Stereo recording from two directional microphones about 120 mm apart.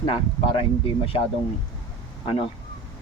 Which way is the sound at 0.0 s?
45° left (ahead or behind).